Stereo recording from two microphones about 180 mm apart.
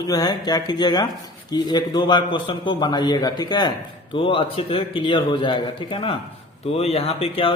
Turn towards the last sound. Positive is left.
turn(degrees=30)  # may be behind; listen again after turning